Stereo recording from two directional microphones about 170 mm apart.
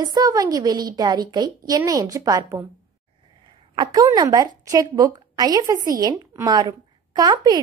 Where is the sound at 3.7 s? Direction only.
25° right (ahead or behind).